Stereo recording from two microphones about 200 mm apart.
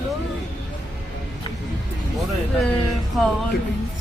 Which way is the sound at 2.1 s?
Centre (ahead or behind).